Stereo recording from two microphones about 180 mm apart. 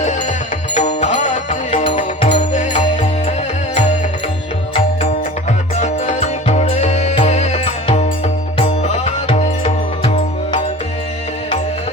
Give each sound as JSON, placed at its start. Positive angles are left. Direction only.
{"t": 0.7, "sound": "music", "side_deg": 40}
{"t": 5.8, "sound": "music", "side_deg": 40}